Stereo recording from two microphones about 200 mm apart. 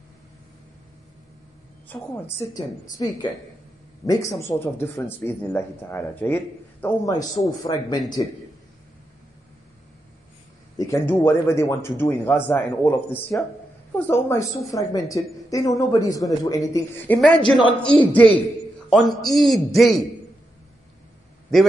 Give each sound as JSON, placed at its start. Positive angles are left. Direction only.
{"t": 1.9, "sound": "speech", "side_deg": 10}
{"t": 10.8, "sound": "a man's voice", "side_deg": 15}